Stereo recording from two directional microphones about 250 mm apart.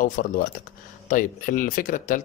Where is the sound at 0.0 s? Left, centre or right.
Left.